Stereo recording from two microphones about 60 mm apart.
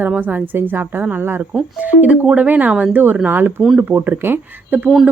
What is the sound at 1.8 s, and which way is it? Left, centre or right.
A woman's voice, right.